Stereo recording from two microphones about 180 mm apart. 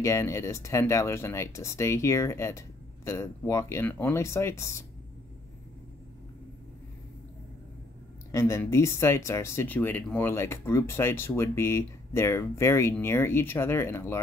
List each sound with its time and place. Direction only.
0.0 s speech: 15° left (ahead or behind)
8.3 s speech: 15° left (ahead or behind)